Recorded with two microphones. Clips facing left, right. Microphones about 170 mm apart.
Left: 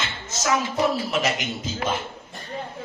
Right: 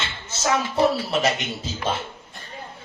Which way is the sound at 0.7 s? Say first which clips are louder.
Right 2 dB; 30° right (ahead or behind).